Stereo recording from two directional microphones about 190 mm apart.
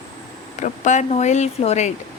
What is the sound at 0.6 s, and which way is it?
A woman's voice, 40° left (ahead or behind).